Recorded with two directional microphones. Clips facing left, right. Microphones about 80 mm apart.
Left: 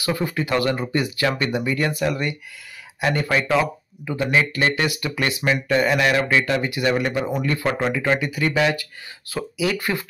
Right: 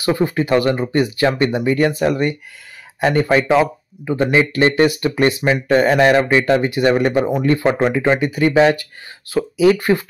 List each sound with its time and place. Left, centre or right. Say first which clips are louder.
0.0 s speech: right 6 dB; right